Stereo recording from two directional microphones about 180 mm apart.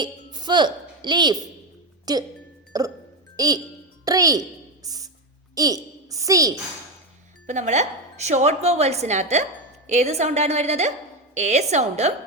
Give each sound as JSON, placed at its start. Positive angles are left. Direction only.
{"t": 0.0, "sound": "speech", "side_deg": -25}
{"t": 4.0, "sound": "a sound", "side_deg": -20}
{"t": 5.5, "sound": "a woman's voice", "side_deg": -20}
{"t": 7.4, "sound": "a woman's voice", "side_deg": -40}